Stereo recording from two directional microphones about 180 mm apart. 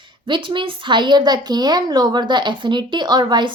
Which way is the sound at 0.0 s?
25° right (ahead or behind).